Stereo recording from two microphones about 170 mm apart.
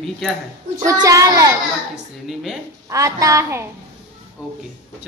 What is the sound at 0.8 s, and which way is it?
Speech, 20° right (ahead or behind).